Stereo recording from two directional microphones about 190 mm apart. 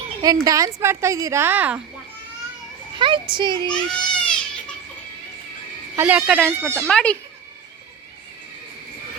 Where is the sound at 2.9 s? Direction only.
25° right (ahead or behind).